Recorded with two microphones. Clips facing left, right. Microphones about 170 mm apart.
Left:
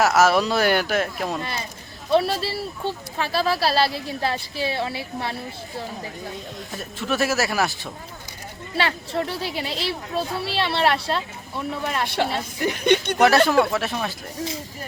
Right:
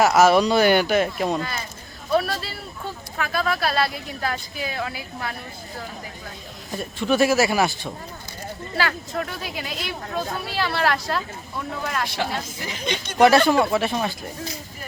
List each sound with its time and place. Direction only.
0.0 s speech: centre (ahead or behind)
1.4 s speech: 25° left (ahead or behind)
6.7 s speech: centre (ahead or behind)
8.7 s speech: 25° left (ahead or behind)
12.0 s speech: 60° left (ahead or behind)
13.1 s speech: centre (ahead or behind)